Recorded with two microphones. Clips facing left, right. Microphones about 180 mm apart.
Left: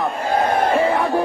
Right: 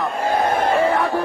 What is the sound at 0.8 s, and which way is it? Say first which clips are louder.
Crowd: left 1 dB; 15° left (ahead or behind).